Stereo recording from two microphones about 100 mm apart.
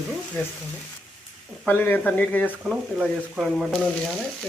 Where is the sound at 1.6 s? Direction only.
15° left (ahead or behind).